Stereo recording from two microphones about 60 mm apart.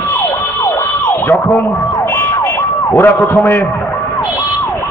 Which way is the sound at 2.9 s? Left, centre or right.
Left.